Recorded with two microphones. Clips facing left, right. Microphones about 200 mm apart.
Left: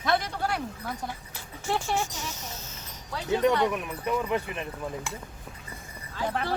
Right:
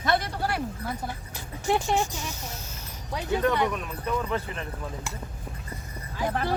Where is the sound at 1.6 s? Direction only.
15° right (ahead or behind).